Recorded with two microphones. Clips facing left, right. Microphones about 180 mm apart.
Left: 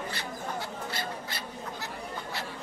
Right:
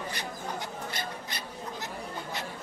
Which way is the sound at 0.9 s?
20° right (ahead or behind).